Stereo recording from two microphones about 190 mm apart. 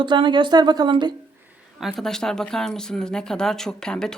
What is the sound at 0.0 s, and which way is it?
A woman's voice, 25° right (ahead or behind).